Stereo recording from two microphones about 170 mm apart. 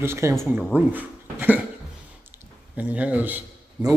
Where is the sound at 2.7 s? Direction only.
10° right (ahead or behind).